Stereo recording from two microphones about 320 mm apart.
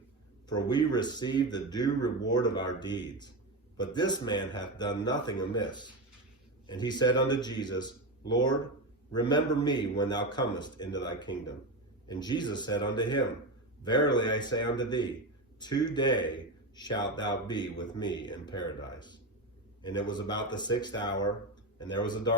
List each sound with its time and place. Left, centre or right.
0.4 s a man's voice: centre